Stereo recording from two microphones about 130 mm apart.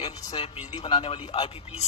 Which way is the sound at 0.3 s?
45° left (ahead or behind).